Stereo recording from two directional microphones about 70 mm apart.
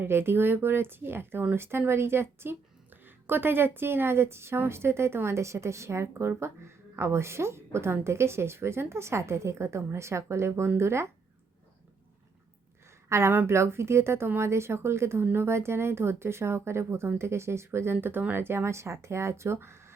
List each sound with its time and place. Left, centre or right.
0.0 s speech: right
13.1 s a woman's voice: right